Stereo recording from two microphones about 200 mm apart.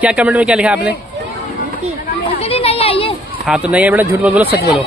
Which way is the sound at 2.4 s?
30° left (ahead or behind).